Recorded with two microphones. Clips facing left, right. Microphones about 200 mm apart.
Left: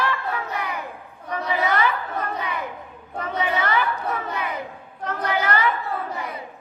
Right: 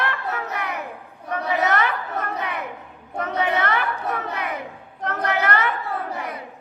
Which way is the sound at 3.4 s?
65° right (ahead or behind).